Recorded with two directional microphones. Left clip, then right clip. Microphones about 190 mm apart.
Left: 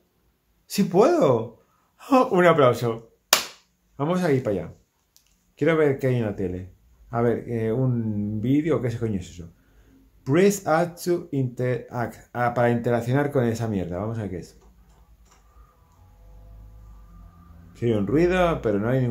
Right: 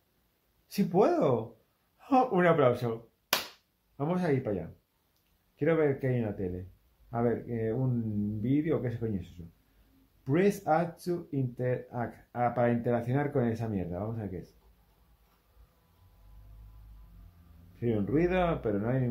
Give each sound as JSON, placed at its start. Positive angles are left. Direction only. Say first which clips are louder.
{"t": 0.7, "sound": "speech", "louder": "left 7 dB", "side_deg": 20}
{"t": 10.2, "sound": "speech", "louder": "left 7 dB", "side_deg": 20}
{"t": 17.7, "sound": "speech", "louder": "left 8 dB", "side_deg": 20}